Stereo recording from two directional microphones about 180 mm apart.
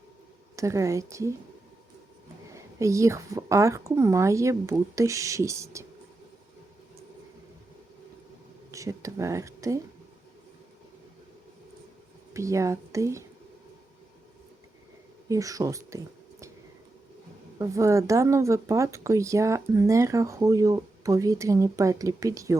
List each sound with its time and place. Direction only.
0.5 s speech: 15° right (ahead or behind)
2.5 s speech: 15° right (ahead or behind)
8.7 s speech: 15° right (ahead or behind)
12.3 s speech: 15° right (ahead or behind)
15.3 s a woman's voice: 20° right (ahead or behind)
17.6 s speech: 15° right (ahead or behind)